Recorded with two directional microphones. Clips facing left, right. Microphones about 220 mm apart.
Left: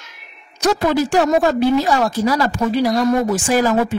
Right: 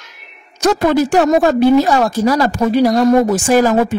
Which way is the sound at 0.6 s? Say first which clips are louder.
Right 4 dB; 50° right (ahead or behind).